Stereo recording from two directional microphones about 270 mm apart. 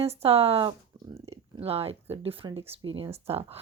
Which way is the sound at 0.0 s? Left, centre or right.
Right.